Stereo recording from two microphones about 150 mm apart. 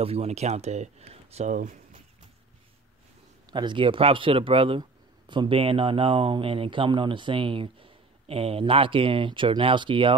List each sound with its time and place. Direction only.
0.0 s speech: 40° right (ahead or behind)
3.5 s speech: 30° right (ahead or behind)